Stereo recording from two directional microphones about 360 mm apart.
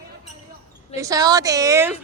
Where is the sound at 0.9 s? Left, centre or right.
Centre.